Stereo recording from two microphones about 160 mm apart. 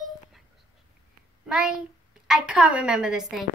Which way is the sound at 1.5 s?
5° right (ahead or behind).